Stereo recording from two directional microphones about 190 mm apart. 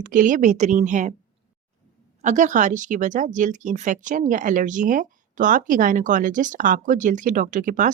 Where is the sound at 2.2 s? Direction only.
40° right (ahead or behind).